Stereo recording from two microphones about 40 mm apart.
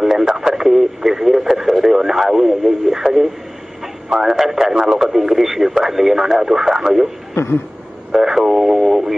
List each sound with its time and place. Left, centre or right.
0.0 s radio: centre
3.8 s speech: centre
7.3 s a sound: left
8.1 s speech: centre